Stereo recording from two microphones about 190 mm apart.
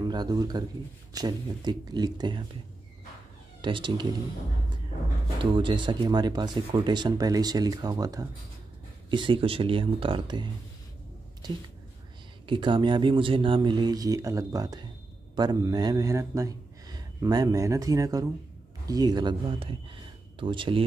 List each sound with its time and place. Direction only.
0.0 s speech: 20° right (ahead or behind)
3.6 s speech: 25° right (ahead or behind)
5.4 s speech: 25° right (ahead or behind)